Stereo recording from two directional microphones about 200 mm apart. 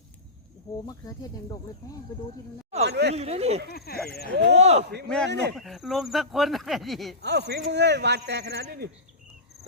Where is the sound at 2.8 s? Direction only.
55° right (ahead or behind).